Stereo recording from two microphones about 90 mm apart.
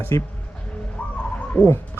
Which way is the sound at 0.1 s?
35° left (ahead or behind).